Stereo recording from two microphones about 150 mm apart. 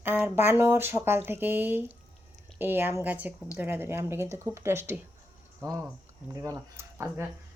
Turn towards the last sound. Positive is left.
turn(degrees=-15)  # may be behind; listen again after turning